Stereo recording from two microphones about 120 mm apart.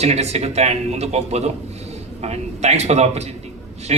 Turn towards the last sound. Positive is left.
turn(degrees=-65)  # may be behind; listen again after turning